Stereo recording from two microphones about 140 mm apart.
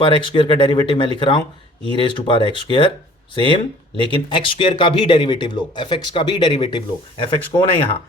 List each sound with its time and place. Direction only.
0.0 s speech: 35° left (ahead or behind)
4.0 s speech: 35° left (ahead or behind)